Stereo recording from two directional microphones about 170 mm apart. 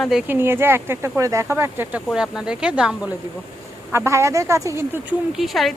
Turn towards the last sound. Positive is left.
turn(degrees=0)  # may be behind; listen again after turning